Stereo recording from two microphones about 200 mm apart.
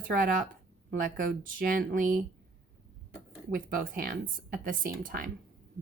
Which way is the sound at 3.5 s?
45° right (ahead or behind).